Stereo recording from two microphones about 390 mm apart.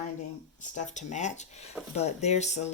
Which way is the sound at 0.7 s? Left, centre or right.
Centre.